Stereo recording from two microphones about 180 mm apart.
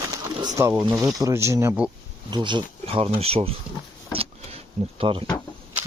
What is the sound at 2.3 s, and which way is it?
Speech, 25° right (ahead or behind).